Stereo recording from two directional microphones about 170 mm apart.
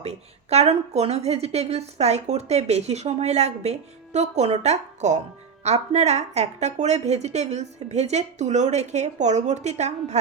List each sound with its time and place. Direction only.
0.0 s a woman's voice: 40° right (ahead or behind)